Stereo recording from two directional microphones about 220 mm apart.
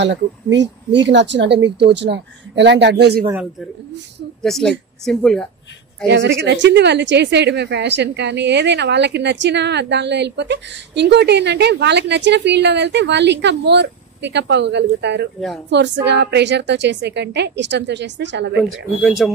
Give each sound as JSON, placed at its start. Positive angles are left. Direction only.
{"t": 0.0, "sound": "speech", "side_deg": -55}
{"t": 4.4, "sound": "a woman's voice", "side_deg": 0}
{"t": 6.0, "sound": "speech", "side_deg": -55}
{"t": 18.9, "sound": "a woman's voice", "side_deg": 0}